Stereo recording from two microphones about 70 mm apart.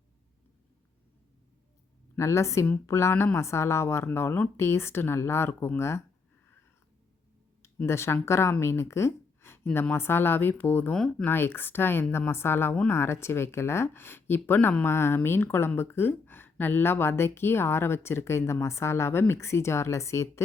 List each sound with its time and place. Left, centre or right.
2.1 s a woman's voice: left
7.9 s speech: left